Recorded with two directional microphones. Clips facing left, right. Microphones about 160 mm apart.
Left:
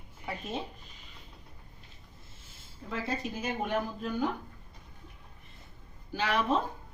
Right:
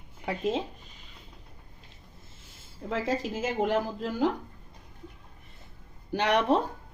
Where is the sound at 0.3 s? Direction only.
90° right.